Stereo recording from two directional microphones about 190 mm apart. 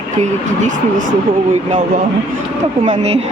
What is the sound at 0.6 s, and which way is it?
Speech, 45° right (ahead or behind).